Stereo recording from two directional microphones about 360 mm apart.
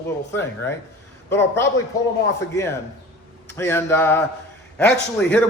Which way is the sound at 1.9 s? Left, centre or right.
Centre.